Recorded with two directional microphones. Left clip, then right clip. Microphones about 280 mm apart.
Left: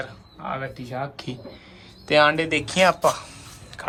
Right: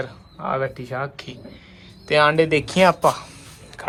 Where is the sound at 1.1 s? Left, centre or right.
Centre.